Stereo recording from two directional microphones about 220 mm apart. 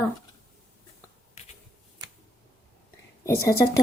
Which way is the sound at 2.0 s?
20° right (ahead or behind).